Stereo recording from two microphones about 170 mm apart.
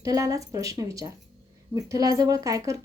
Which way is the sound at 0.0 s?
20° right (ahead or behind).